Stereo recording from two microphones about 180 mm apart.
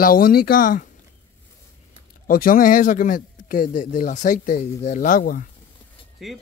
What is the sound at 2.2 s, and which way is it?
Speech, 50° left (ahead or behind).